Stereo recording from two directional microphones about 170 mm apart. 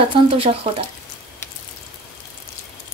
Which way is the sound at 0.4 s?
35° right (ahead or behind).